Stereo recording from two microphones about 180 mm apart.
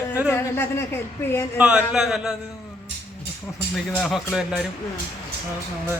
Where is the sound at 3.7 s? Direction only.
Centre (ahead or behind).